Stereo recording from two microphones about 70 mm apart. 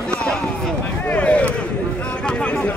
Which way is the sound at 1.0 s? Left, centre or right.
Centre.